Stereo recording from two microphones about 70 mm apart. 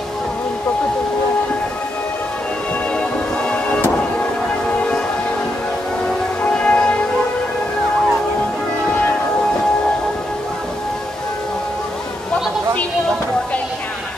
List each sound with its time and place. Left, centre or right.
3.0 s music: centre
4.7 s train: centre
6.4 s music: centre